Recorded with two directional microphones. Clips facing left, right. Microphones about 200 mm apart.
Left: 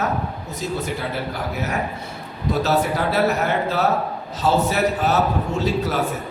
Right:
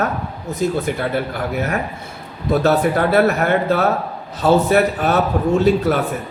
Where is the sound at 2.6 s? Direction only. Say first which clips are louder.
Right 4 dB; 55° right (ahead or behind).